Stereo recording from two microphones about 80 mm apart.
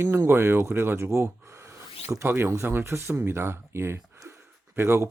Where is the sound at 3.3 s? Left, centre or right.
Right.